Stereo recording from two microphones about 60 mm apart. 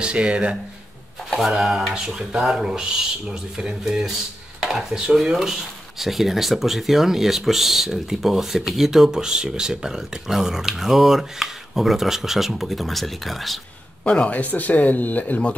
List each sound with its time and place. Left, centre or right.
0.0 s speech: centre
1.3 s speech: centre
4.6 s a sound: centre
5.1 s speech: centre
14.0 s speech: centre